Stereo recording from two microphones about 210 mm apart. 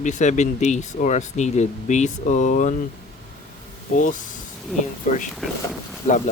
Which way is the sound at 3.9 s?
40° left (ahead or behind).